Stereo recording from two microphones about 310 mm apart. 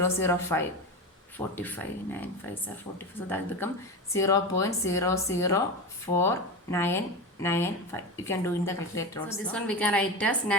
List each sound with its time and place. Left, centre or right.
0.0 s speech: centre